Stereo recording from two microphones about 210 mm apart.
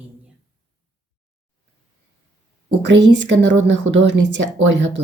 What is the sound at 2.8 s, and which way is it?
A woman's voice, 60° right (ahead or behind).